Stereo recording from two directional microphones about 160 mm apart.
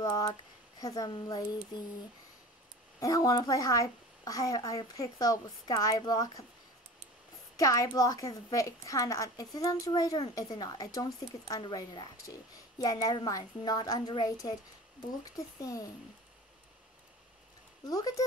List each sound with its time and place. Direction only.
0.2 s speech: 20° left (ahead or behind)
3.0 s a woman's voice: 20° left (ahead or behind)
7.5 s a woman's voice: 20° left (ahead or behind)
17.8 s a woman's voice: 20° left (ahead or behind)